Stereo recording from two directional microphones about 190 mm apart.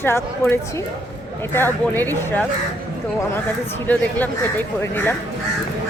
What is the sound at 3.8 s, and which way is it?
Speech, 10° left (ahead or behind).